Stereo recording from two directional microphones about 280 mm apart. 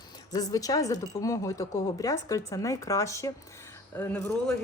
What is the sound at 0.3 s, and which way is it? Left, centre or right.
A woman's voice, centre.